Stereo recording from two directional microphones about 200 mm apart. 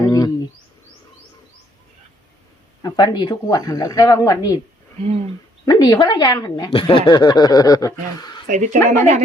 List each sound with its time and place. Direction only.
0.0 s bird: 15° left (ahead or behind)
2.8 s speech: 20° left (ahead or behind)
5.6 s speech: 20° left (ahead or behind)
8.4 s a woman's voice: 40° right (ahead or behind)